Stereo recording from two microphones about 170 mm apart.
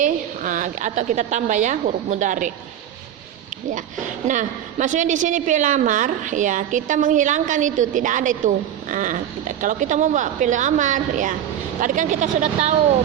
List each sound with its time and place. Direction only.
0.0 s a woman's voice: 50° right (ahead or behind)
3.8 s a woman's voice: 50° right (ahead or behind)